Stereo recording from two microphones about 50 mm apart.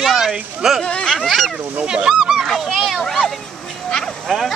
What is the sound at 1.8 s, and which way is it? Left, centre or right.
Speech, centre.